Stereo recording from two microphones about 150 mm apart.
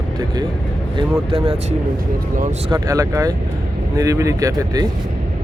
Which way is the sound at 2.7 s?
25° right (ahead or behind).